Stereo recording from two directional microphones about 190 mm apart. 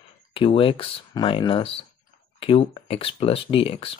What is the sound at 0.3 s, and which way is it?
Speech, 30° left (ahead or behind).